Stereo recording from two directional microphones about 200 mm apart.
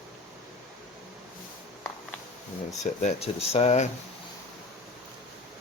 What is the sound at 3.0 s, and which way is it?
Speech, 35° left (ahead or behind).